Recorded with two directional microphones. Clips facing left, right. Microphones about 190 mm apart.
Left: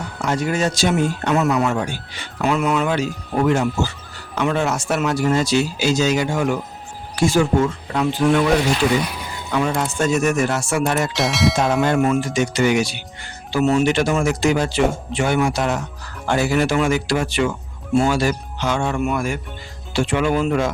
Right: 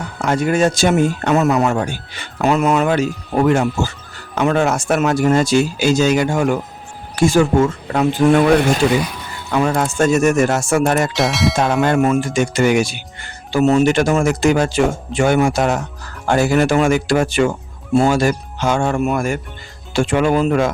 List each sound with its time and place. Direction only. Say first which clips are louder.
0.2 s speech: right 5 dB; 55° right (ahead or behind)
9.0 s a sound: left 1 dB; 10° left (ahead or behind)
9.5 s speech: right 4 dB; 50° right (ahead or behind)
11.1 s bell: right 2 dB; centre (ahead or behind)
11.5 s speech: right 2 dB; 60° right (ahead or behind)